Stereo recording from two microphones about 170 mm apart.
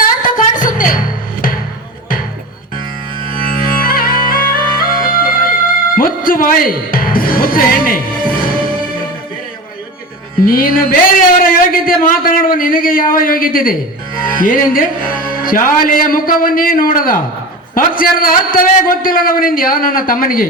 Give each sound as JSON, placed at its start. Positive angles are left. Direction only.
{"t": 0.0, "sound": "music", "side_deg": 55}
{"t": 3.3, "sound": "music", "side_deg": 60}
{"t": 10.4, "sound": "a man's voice", "side_deg": 55}